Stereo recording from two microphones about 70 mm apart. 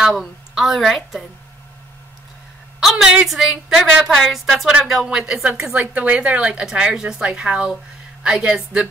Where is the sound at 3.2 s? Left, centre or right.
Centre.